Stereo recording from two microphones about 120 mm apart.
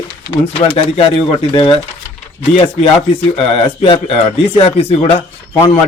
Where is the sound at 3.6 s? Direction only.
50° left (ahead or behind).